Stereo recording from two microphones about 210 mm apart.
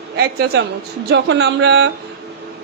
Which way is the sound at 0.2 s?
50° right (ahead or behind).